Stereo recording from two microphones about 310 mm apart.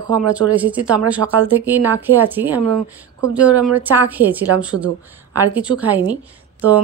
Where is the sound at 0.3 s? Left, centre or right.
Centre.